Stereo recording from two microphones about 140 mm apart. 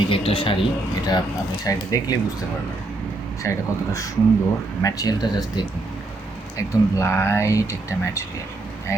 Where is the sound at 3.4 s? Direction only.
20° left (ahead or behind).